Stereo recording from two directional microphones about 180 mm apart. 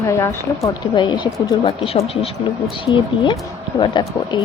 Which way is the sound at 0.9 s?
25° left (ahead or behind).